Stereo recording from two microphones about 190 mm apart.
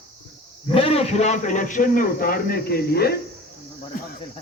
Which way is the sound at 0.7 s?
30° left (ahead or behind).